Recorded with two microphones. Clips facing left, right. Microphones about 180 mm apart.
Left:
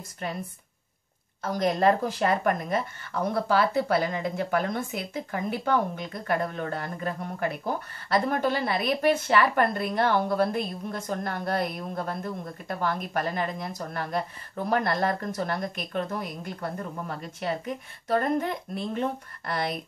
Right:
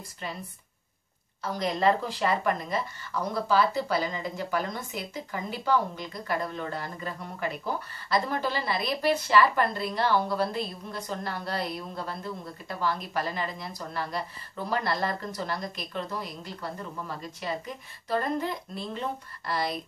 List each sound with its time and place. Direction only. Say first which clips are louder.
0.2 s speech: left 4 dB; 55° left (ahead or behind)
1.6 s speech: left 3 dB; 50° left (ahead or behind)